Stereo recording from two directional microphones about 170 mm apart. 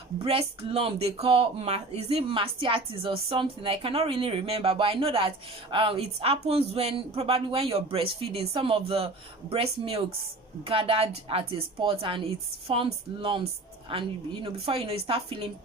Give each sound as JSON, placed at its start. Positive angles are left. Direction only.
{"t": 0.2, "sound": "speech", "side_deg": -35}